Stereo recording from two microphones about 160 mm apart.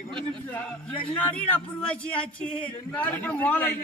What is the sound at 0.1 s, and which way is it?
A man's voice, 5° left (ahead or behind).